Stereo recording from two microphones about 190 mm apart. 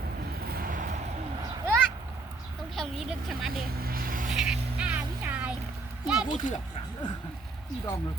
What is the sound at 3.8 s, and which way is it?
Vehicle, 50° right (ahead or behind).